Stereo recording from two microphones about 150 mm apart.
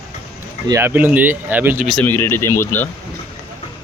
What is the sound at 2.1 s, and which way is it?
Speech, 15° left (ahead or behind).